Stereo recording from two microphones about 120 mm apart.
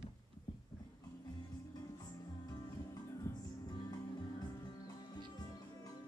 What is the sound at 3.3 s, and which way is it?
Music, 20° left (ahead or behind).